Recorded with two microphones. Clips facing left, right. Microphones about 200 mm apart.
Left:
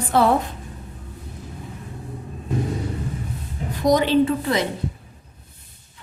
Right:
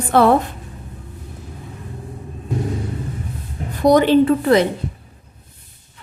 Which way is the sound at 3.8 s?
55° right (ahead or behind).